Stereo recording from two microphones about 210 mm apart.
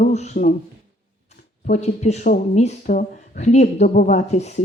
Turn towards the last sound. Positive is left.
turn(degrees=30)  # may be behind; listen again after turning